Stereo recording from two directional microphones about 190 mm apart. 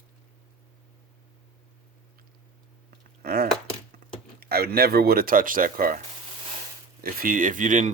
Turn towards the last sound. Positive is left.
turn(degrees=-45)  # may be behind; listen again after turning